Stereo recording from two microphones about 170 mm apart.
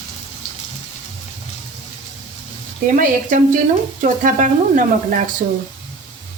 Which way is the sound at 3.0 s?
50° right (ahead or behind).